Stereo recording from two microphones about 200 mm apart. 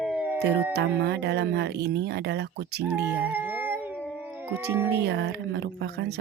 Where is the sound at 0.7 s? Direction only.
55° right (ahead or behind).